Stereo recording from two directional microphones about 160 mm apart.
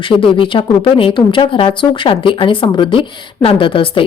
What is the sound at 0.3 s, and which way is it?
Speech, 30° left (ahead or behind).